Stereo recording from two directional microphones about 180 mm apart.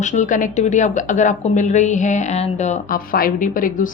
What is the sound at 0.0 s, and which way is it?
A woman's voice, 40° left (ahead or behind).